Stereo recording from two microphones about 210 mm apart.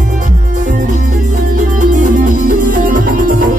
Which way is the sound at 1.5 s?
40° right (ahead or behind).